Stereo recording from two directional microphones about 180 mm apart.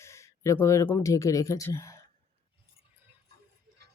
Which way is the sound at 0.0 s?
15° left (ahead or behind).